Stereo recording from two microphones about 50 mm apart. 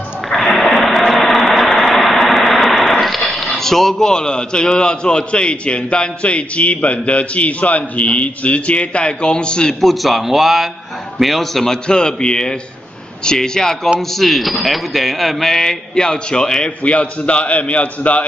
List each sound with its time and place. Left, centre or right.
0.3 s a sound: centre
2.9 s speech: centre
9.8 s a man's voice: centre; by 18.2 s left